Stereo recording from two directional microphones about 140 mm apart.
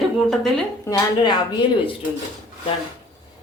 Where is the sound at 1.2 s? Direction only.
30° left (ahead or behind).